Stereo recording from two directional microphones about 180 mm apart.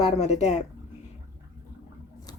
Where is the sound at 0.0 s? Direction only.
35° left (ahead or behind).